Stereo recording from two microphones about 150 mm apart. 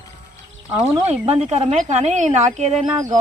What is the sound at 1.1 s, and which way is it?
Speech, 45° right (ahead or behind).